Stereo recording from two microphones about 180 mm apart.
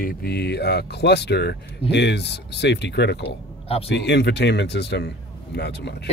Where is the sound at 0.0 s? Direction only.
55° left (ahead or behind).